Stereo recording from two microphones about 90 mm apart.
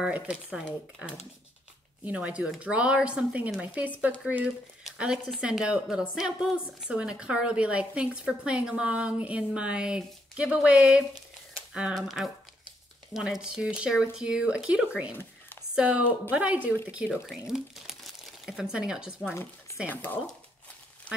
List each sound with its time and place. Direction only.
0.0 s a woman's voice: 15° right (ahead or behind)
2.0 s a woman's voice: 15° right (ahead or behind)
17.0 s speech: 5° right (ahead or behind)
19.9 s speech: 20° left (ahead or behind)